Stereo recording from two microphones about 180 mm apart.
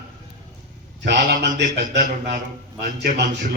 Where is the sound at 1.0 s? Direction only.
65° right (ahead or behind).